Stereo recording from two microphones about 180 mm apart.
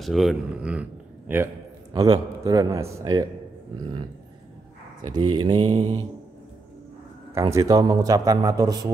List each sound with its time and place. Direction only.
0.0 s a man's voice: centre (ahead or behind); by 3.3 s 20° right (ahead or behind)
5.1 s a man's voice: 25° right (ahead or behind)
7.5 s a man's voice: 20° right (ahead or behind)